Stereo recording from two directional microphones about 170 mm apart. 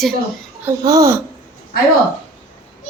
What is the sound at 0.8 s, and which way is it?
Speech, 20° right (ahead or behind).